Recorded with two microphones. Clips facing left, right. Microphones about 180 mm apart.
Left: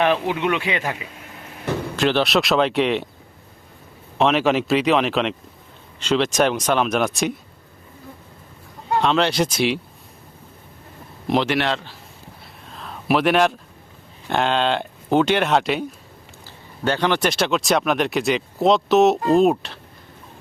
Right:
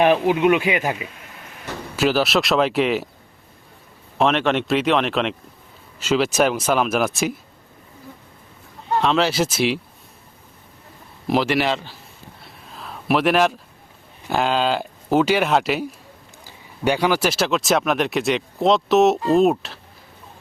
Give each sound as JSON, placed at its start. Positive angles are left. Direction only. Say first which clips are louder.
{"t": 0.0, "sound": "speech", "louder": "right 4 dB", "side_deg": -15}
{"t": 2.0, "sound": "speech", "louder": "right 1 dB", "side_deg": -5}
{"t": 4.2, "sound": "speech", "louder": "left 1 dB", "side_deg": 0}
{"t": 9.0, "sound": "speech", "louder": "even", "side_deg": 0}
{"t": 11.3, "sound": "speech", "louder": "right 1 dB", "side_deg": 0}
{"t": 12.7, "sound": "a sound", "louder": "even", "side_deg": 0}
{"t": 14.3, "sound": "speech", "louder": "even", "side_deg": -5}